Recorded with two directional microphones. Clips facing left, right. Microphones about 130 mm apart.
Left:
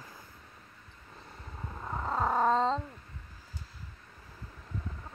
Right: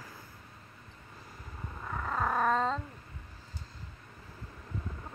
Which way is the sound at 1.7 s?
20° left (ahead or behind).